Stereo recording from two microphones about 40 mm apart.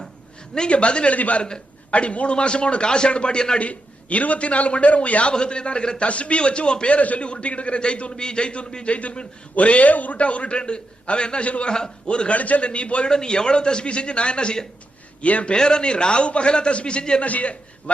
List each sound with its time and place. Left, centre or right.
0.7 s a man's voice: left
1.4 s a man's voice: left
1.9 s a man's voice: left
3.6 s a man's voice: left
11.7 s a man's voice: left
15.2 s a man's voice: left
15.5 s a man's voice: left
17.2 s a man's voice: left